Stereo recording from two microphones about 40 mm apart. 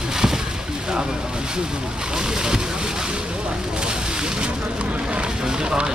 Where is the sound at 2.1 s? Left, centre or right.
Centre.